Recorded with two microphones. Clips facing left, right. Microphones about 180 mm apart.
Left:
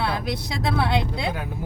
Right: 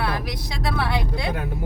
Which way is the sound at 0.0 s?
25° left (ahead or behind).